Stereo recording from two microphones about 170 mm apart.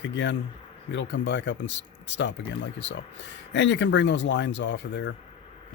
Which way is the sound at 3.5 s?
90° left.